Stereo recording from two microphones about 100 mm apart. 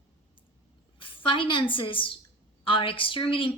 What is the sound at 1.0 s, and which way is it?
A woman's voice, 55° left (ahead or behind).